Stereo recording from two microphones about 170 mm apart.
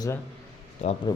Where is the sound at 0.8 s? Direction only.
40° left (ahead or behind).